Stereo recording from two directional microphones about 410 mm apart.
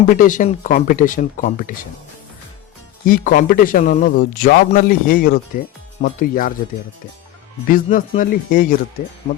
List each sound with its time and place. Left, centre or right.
0.1 s speech: centre
3.1 s speech: centre
7.7 s speech: centre